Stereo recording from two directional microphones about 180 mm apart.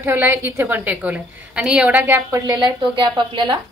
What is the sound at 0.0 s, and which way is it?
A woman's voice, 10° right (ahead or behind).